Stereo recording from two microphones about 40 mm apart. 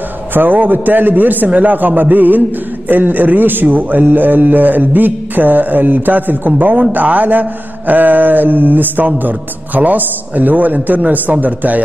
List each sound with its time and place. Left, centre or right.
0.3 s a man's voice: right